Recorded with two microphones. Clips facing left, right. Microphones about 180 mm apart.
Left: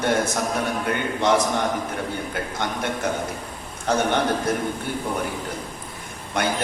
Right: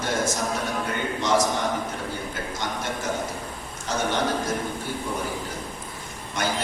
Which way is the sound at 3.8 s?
60° left (ahead or behind).